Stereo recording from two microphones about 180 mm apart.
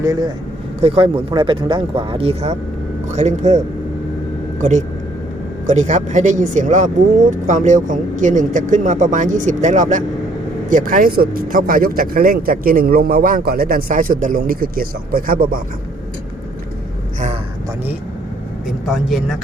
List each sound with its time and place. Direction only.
0.0 s speech: 20° right (ahead or behind)
0.8 s speech: 30° right (ahead or behind)
5.6 s speech: 40° right (ahead or behind)
18.9 s speech: centre (ahead or behind)